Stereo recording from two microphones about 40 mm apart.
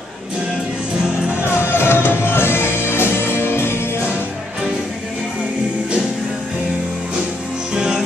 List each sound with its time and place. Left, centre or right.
1.4 s music: left
7.7 s music: centre